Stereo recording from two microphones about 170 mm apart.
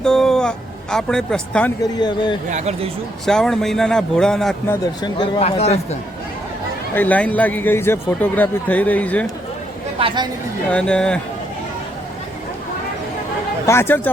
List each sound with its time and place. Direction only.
0.0 s speech: 5° left (ahead or behind)
2.0 s speech: 25° left (ahead or behind)
2.5 s speech: 40° right (ahead or behind)
3.2 s speech: 5° left (ahead or behind)
5.0 s speech: 25° left (ahead or behind)
5.4 s speech: 40° left (ahead or behind)
6.9 s a man's voice: 10° left (ahead or behind)
10.7 s speech: 5° left (ahead or behind)
13.7 s a man's voice: 15° left (ahead or behind)